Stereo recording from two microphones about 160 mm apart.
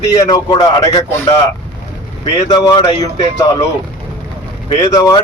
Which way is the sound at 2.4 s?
30° left (ahead or behind).